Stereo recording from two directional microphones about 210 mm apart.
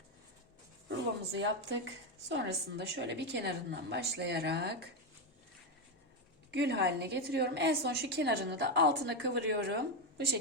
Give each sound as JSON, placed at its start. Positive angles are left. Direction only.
{"t": 0.9, "sound": "a woman's voice", "side_deg": -60}
{"t": 6.5, "sound": "a woman's voice", "side_deg": -50}